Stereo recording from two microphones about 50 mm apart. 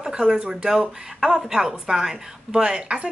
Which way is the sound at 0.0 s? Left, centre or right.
Centre.